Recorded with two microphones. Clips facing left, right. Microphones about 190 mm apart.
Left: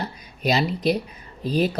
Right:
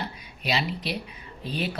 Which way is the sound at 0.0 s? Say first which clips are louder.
Left 7 dB; 40° left (ahead or behind).